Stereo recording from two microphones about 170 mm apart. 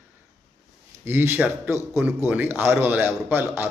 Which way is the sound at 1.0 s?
15° right (ahead or behind).